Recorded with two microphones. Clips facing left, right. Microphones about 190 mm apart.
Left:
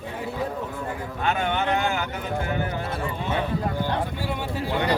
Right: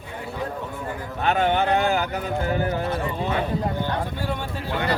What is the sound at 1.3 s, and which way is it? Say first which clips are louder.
Speech: right 4 dB; 35° right (ahead or behind).